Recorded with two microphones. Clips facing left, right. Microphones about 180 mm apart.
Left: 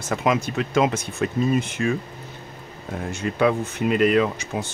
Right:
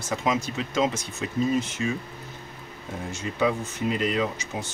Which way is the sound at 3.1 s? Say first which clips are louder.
Left 5 dB; 65° left (ahead or behind).